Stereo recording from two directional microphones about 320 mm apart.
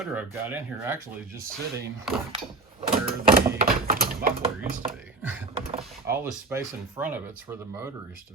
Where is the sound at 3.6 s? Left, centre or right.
Right.